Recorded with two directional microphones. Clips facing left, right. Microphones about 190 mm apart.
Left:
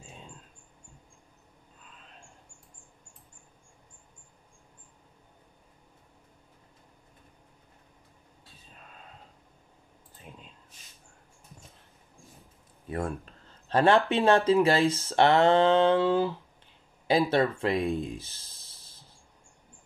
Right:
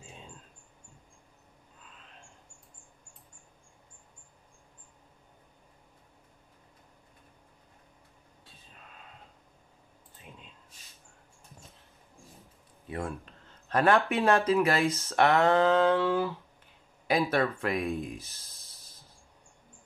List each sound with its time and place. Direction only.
12.8 s a sound: 40° left (ahead or behind)
14.1 s speech: 30° left (ahead or behind)
18.2 s snake: 30° left (ahead or behind)